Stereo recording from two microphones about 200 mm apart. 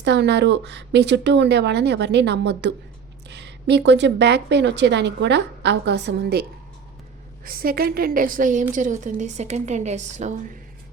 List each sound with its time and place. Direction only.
0.0 s speech: 60° right (ahead or behind)
7.4 s a woman's voice: 50° right (ahead or behind)